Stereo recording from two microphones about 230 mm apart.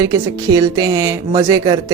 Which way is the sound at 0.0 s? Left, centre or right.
Centre.